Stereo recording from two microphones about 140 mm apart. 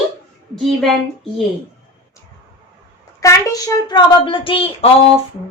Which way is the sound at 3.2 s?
25° left (ahead or behind).